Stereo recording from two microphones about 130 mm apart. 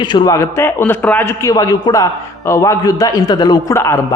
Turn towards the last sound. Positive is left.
turn(degrees=20)  # may be behind; listen again after turning